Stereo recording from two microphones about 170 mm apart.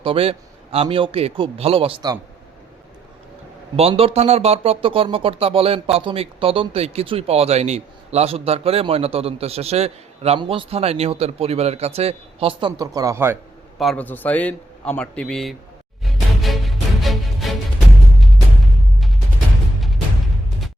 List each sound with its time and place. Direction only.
0.0 s speech: 35° right (ahead or behind)
3.8 s speech: 35° right (ahead or behind); by 13.4 s 15° right (ahead or behind)
13.7 s a man's voice: 5° left (ahead or behind)
16.0 s music: centre (ahead or behind)